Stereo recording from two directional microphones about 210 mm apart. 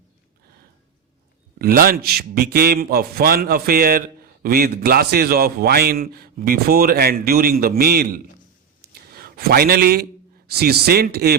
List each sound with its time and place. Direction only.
1.5 s a man's voice: 45° right (ahead or behind)